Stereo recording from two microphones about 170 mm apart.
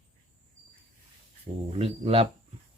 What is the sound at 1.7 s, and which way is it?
Speech, 35° right (ahead or behind).